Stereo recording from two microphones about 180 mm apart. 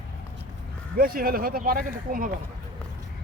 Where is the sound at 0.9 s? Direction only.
55° right (ahead or behind).